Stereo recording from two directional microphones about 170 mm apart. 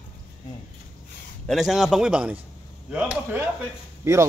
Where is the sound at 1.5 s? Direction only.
Centre (ahead or behind).